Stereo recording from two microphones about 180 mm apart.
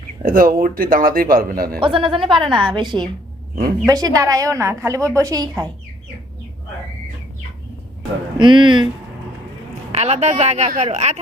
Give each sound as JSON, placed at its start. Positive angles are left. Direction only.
{"t": 0.2, "sound": "speech", "side_deg": -50}
{"t": 1.8, "sound": "a woman's voice", "side_deg": -30}
{"t": 8.4, "sound": "a woman's voice", "side_deg": -25}
{"t": 9.9, "sound": "speech", "side_deg": -35}